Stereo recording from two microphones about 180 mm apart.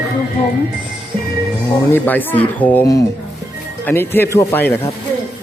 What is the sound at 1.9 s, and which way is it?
Speech, 10° left (ahead or behind).